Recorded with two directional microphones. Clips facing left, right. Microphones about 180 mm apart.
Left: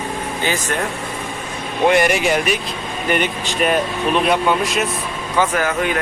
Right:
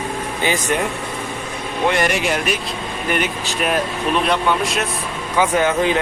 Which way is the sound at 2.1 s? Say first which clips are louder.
Left 3 dB; centre (ahead or behind).